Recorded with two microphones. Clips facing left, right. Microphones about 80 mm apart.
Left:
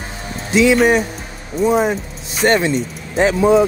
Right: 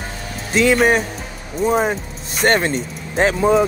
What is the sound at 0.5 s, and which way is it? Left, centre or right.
Speech, right.